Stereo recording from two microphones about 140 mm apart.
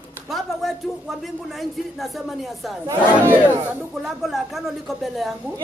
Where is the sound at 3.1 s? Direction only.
15° right (ahead or behind).